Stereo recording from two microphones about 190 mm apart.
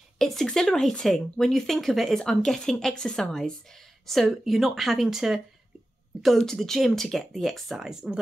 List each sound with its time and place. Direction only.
0.2 s speech: centre (ahead or behind)